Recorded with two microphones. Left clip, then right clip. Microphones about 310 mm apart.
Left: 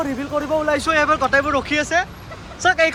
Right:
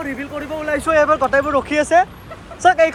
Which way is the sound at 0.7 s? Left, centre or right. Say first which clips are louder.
Right 6 dB; centre.